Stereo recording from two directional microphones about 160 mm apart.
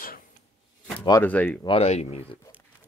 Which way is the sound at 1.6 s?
35° left (ahead or behind).